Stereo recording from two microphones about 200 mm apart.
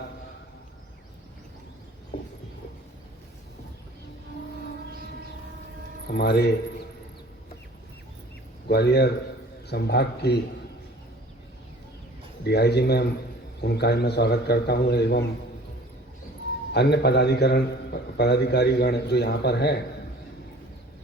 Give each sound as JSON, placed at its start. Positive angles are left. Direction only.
{"t": 6.1, "sound": "speech", "side_deg": 55}
{"t": 8.6, "sound": "a man's voice", "side_deg": 55}
{"t": 12.5, "sound": "a man's voice", "side_deg": 55}
{"t": 16.7, "sound": "a man's voice", "side_deg": 55}